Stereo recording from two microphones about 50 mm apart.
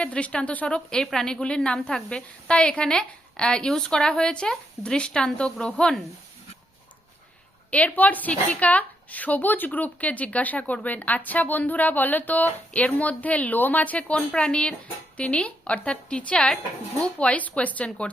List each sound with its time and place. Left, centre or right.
0.0 s a woman's voice: left
7.7 s a woman's voice: left